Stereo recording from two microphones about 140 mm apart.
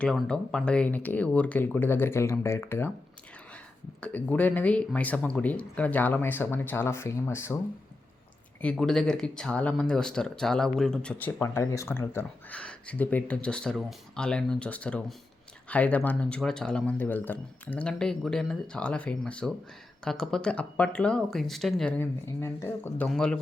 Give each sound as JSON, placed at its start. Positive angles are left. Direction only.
{"t": 0.0, "sound": "speech", "side_deg": 5}
{"t": 4.0, "sound": "speech", "side_deg": 10}
{"t": 8.6, "sound": "speech", "side_deg": 5}
{"t": 11.4, "sound": "speech", "side_deg": 20}
{"t": 22.4, "sound": "speech", "side_deg": 20}
{"t": 23.0, "sound": "speech", "side_deg": 5}